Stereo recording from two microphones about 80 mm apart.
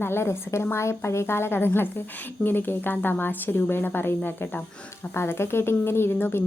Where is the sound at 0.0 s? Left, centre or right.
Left.